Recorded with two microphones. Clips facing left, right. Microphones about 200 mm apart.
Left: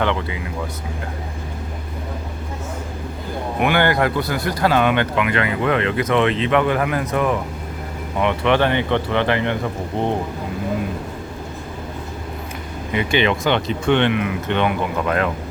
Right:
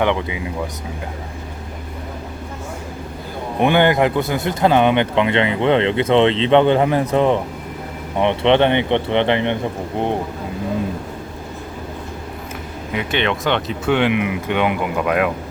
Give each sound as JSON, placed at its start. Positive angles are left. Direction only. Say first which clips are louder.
{"t": 0.0, "sound": "speech", "louder": "right 3 dB", "side_deg": -15}
{"t": 3.6, "sound": "speech", "louder": "right 3 dB", "side_deg": -20}
{"t": 12.9, "sound": "speech", "louder": "left 2 dB", "side_deg": 0}
{"t": 14.1, "sound": "speech", "louder": "right 1 dB", "side_deg": -15}